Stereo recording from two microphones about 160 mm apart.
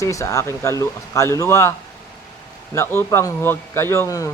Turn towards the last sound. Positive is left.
turn(degrees=20)  # may be behind; listen again after turning